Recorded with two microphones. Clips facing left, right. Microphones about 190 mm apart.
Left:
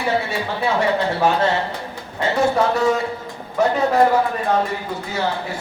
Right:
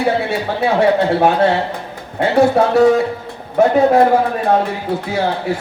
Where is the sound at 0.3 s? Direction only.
60° right (ahead or behind).